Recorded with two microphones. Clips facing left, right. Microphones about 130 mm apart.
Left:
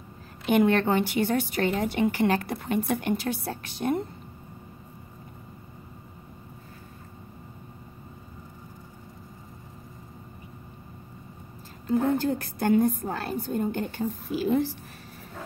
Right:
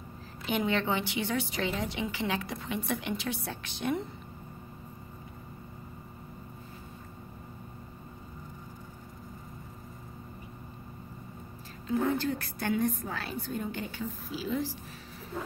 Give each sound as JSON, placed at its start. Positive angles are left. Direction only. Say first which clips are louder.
{"t": 0.5, "sound": "a woman's voice", "louder": "left 8 dB", "side_deg": 55}
{"t": 11.9, "sound": "a woman's voice", "louder": "left 5 dB", "side_deg": 50}